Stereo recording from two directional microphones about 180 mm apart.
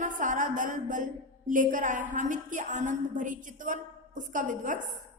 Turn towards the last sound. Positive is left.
turn(degrees=-45)  # may be behind; listen again after turning